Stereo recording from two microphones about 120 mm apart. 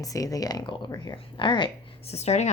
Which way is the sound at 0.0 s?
30° left (ahead or behind).